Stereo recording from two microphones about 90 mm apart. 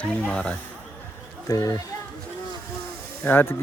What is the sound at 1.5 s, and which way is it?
Speech, 40° left (ahead or behind).